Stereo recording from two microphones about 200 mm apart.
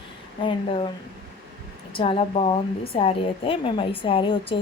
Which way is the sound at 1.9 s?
25° left (ahead or behind).